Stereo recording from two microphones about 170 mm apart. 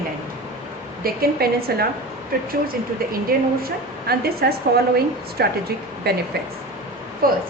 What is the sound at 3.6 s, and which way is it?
A woman's voice, 65° right (ahead or behind).